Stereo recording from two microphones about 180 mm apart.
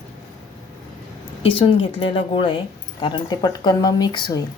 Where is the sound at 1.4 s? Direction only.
30° left (ahead or behind).